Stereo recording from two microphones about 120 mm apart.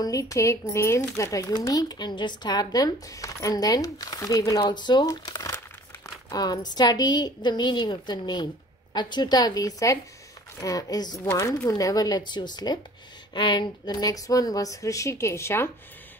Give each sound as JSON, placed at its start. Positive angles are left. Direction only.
{"t": 0.0, "sound": "speech", "side_deg": 30}